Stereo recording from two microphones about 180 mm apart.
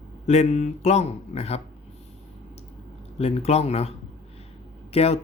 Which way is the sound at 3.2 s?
35° left (ahead or behind).